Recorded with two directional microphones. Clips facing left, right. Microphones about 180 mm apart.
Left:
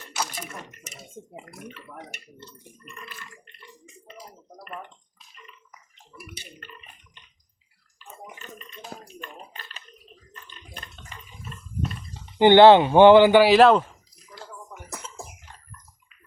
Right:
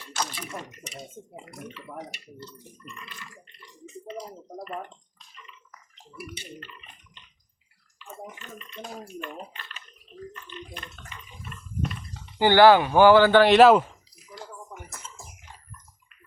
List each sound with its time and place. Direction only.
0.9 s speech: 5° left (ahead or behind)
1.7 s speech: 50° left (ahead or behind)
8.0 s bathtub: 40° left (ahead or behind)
9.5 s speech: 40° left (ahead or behind)
11.0 s water: 25° left (ahead or behind)
12.4 s speech: 20° left (ahead or behind); by 13.8 s 5° right (ahead or behind)
14.8 s a sound: 65° left (ahead or behind)